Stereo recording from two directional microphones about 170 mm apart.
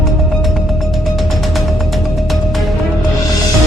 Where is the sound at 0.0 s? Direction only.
Centre (ahead or behind).